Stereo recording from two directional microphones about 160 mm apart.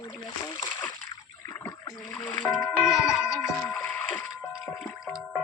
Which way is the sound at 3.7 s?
5° left (ahead or behind).